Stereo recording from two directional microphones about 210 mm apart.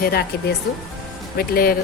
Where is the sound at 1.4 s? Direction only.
45° left (ahead or behind).